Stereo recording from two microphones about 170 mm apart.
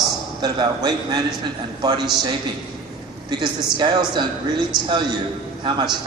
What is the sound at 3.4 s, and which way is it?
Speech, 25° right (ahead or behind).